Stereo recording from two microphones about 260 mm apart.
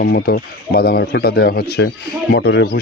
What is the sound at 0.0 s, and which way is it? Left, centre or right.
Speech, left.